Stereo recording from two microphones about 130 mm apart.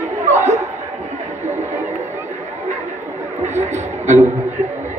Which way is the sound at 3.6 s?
60° right (ahead or behind).